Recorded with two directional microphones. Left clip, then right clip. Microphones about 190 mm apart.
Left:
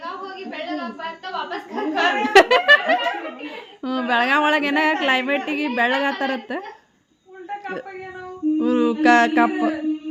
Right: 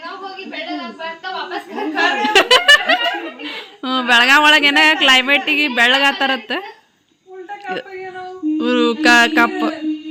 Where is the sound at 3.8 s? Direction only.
5° right (ahead or behind).